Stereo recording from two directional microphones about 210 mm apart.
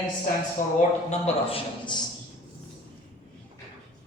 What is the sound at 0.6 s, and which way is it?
A man's voice, 35° left (ahead or behind).